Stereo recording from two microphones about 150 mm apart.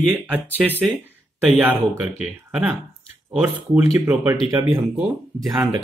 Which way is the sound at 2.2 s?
5° right (ahead or behind).